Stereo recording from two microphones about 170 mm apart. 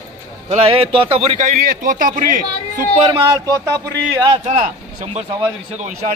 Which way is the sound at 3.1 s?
25° right (ahead or behind).